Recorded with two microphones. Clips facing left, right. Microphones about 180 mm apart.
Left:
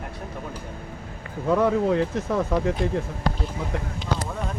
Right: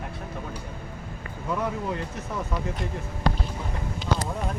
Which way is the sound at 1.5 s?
80° left.